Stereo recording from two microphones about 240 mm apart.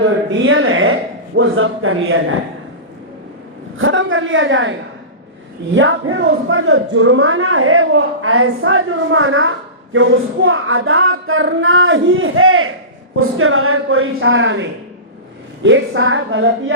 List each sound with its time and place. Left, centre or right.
0.4 s a woman's voice: right
3.8 s a woman's voice: right
5.7 s a woman's voice: right